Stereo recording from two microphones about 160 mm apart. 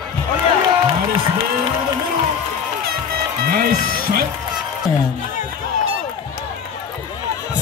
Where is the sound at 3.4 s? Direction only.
70° right (ahead or behind).